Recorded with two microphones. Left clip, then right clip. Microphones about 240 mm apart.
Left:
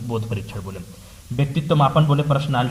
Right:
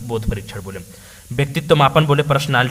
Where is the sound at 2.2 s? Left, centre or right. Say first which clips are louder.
Right 5 dB; right.